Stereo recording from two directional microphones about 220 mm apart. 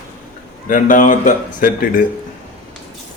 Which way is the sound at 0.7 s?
35° left (ahead or behind).